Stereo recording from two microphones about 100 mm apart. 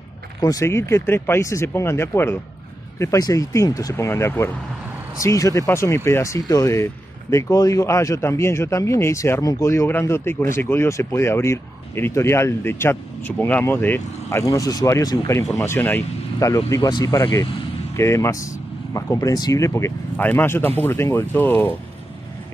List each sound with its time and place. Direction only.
0.4 s speech: 35° left (ahead or behind)
3.0 s speech: 35° left (ahead or behind)
9.7 s speech: 25° left (ahead or behind)
14.4 s speech: 35° left (ahead or behind)
16.3 s speech: 35° left (ahead or behind)
20.2 s speech: 20° left (ahead or behind)